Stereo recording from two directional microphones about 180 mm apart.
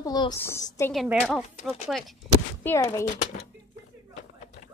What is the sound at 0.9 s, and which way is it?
Speech, centre (ahead or behind).